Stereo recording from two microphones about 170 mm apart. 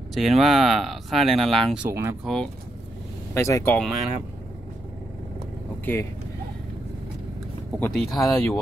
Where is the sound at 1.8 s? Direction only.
15° right (ahead or behind).